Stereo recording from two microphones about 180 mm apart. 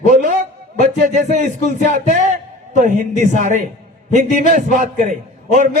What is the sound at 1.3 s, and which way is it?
A man's voice, 45° right (ahead or behind).